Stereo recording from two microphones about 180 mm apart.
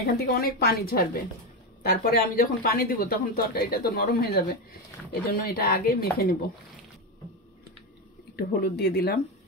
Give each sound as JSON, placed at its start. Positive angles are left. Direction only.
{"t": 0.0, "sound": "speech", "side_deg": 60}
{"t": 8.4, "sound": "speech", "side_deg": 60}